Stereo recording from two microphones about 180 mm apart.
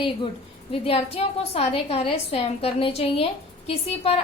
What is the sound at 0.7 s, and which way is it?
A woman's voice, 35° left (ahead or behind).